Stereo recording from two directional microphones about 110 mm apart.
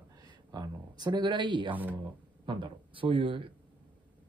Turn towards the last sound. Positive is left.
turn(degrees=-50)  # may be behind; listen again after turning